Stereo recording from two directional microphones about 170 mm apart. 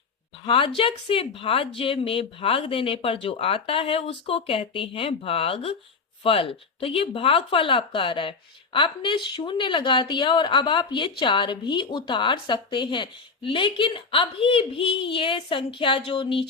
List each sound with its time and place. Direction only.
0.4 s a woman's voice: 30° left (ahead or behind)